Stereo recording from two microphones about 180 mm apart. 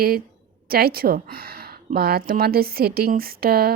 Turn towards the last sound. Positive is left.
turn(degrees=-55)  # may be behind; listen again after turning